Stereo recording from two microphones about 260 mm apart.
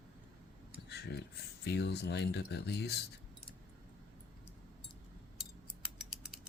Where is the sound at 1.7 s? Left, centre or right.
Left.